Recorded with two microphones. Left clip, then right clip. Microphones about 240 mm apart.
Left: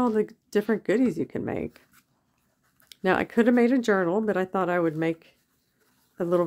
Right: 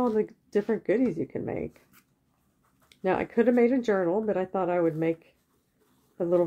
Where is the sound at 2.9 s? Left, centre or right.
Left.